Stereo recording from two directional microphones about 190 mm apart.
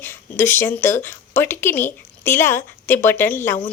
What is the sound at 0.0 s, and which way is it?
A woman's voice, 10° left (ahead or behind).